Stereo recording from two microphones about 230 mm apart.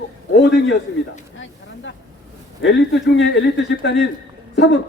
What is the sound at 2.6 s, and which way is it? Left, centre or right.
A man's voice, left.